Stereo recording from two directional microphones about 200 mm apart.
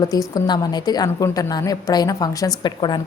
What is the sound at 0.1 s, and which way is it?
A woman's voice, 20° left (ahead or behind).